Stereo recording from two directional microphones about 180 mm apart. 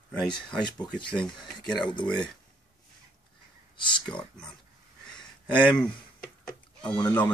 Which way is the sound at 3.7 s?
25° left (ahead or behind).